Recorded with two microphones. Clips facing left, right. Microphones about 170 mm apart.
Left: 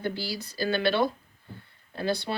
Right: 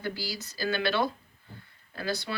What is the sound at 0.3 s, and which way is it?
Speech, 30° left (ahead or behind).